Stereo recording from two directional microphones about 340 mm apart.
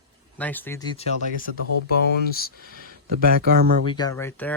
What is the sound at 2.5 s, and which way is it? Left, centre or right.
Speech, right.